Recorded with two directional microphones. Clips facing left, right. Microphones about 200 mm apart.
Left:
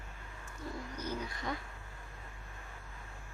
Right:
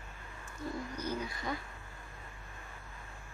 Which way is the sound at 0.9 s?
10° right (ahead or behind).